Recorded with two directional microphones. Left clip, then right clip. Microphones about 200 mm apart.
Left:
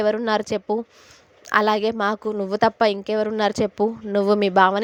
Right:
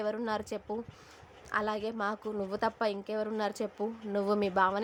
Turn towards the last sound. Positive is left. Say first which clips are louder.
# left 12 dB
turn(degrees=40)  # may be behind; listen again after turning